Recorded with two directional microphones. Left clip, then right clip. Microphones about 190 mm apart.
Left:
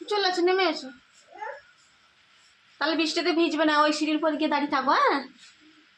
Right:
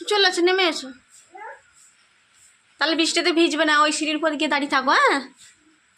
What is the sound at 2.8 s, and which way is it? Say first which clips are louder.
A woman's voice: right 5 dB; 15° right (ahead or behind).